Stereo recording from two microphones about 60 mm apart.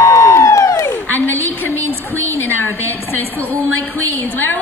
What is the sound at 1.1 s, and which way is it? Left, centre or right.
A woman's voice, left.